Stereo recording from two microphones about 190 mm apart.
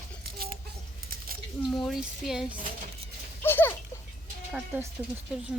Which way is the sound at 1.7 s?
Centre (ahead or behind).